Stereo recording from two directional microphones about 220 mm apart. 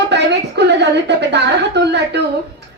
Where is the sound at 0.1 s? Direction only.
50° right (ahead or behind).